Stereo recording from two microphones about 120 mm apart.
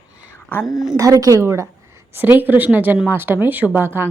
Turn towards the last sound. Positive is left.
turn(degrees=-15)  # may be behind; listen again after turning